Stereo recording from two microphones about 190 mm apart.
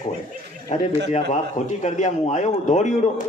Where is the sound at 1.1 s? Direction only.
40° left (ahead or behind).